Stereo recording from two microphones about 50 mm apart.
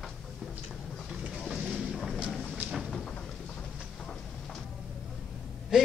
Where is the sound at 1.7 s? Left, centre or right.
Centre.